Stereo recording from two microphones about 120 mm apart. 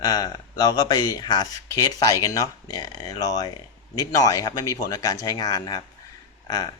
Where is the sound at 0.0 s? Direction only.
30° left (ahead or behind).